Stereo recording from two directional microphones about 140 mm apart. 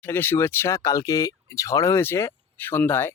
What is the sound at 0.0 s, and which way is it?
Speech, 15° left (ahead or behind).